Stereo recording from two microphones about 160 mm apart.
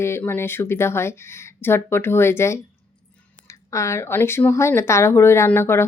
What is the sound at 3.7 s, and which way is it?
Speech, 20° left (ahead or behind).